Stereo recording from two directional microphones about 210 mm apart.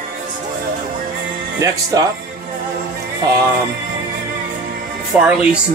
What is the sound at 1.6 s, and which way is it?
Speech, 15° right (ahead or behind).